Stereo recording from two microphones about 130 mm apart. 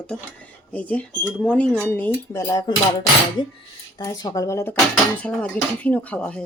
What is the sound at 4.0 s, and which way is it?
Speech, 25° left (ahead or behind).